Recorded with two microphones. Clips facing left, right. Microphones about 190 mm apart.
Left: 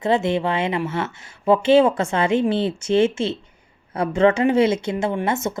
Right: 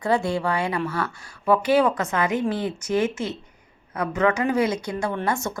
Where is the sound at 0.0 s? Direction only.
20° left (ahead or behind).